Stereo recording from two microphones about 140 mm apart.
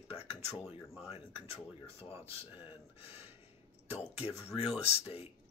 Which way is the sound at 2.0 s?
45° left (ahead or behind).